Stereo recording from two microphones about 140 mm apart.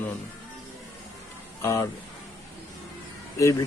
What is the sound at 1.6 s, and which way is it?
Speech, 20° left (ahead or behind).